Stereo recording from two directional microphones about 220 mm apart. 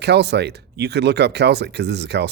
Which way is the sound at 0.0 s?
50° right (ahead or behind).